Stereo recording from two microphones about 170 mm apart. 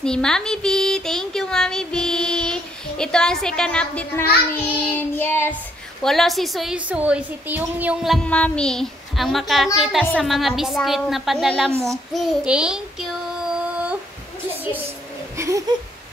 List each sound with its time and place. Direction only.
0.0 s speech: 5° left (ahead or behind)
6.0 s speech: centre (ahead or behind)
15.3 s a sound: 15° right (ahead or behind)